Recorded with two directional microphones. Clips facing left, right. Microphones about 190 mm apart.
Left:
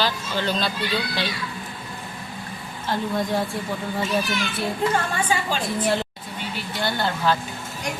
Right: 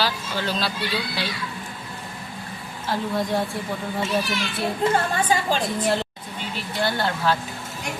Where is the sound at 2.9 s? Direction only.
Centre (ahead or behind).